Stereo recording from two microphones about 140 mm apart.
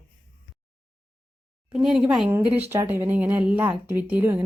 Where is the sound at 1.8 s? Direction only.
5° right (ahead or behind).